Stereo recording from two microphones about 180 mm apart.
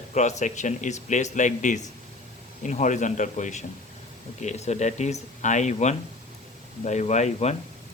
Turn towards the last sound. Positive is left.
turn(degrees=40)  # may be behind; listen again after turning